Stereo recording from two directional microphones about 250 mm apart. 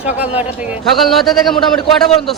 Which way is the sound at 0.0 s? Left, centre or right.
Centre.